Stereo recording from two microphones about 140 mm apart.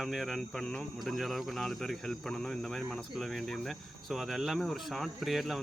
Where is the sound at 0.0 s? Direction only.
Centre (ahead or behind).